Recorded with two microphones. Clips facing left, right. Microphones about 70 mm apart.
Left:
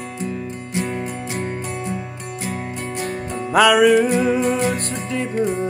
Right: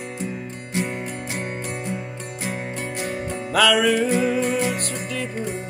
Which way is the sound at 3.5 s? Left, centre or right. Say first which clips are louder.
Left 5 dB; left.